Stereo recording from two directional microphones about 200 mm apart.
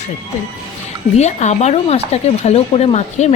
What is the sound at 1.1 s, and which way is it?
A woman's voice, 35° left (ahead or behind).